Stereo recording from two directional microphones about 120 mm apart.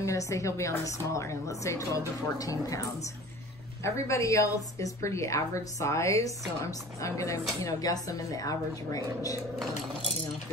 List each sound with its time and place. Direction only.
0.0 s a woman's voice: 25° left (ahead or behind)